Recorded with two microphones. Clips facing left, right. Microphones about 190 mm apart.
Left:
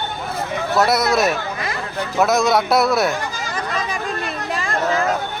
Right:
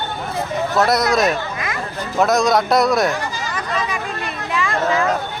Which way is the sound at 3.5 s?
40° left (ahead or behind).